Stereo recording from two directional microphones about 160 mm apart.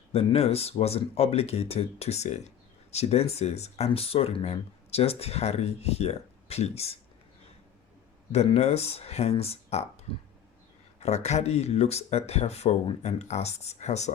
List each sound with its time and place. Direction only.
0.1 s speech: 35° left (ahead or behind)
8.3 s speech: 40° left (ahead or behind)
11.0 s speech: 45° left (ahead or behind)